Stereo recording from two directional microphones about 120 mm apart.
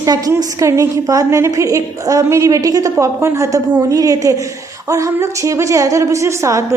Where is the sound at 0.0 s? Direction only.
30° right (ahead or behind).